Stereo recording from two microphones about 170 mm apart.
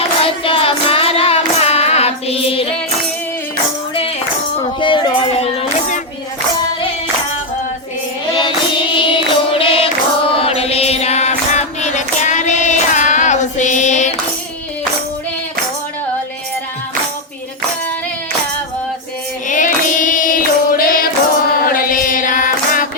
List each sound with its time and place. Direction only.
0.2 s hands: 35° left (ahead or behind)
4.6 s a sound: 30° left (ahead or behind)
8.3 s music: 30° left (ahead or behind)
9.0 s choir: 30° left (ahead or behind)
19.5 s carnatic music: 50° left (ahead or behind)
21.7 s music: 55° left (ahead or behind)